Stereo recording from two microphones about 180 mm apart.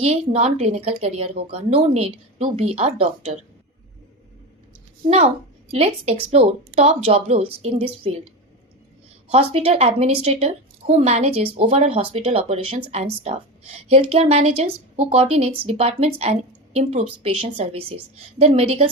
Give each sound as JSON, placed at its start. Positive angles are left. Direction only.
{"t": 0.0, "sound": "a woman's voice", "side_deg": -35}
{"t": 5.0, "sound": "a woman's voice", "side_deg": -35}
{"t": 9.3, "sound": "a woman's voice", "side_deg": -35}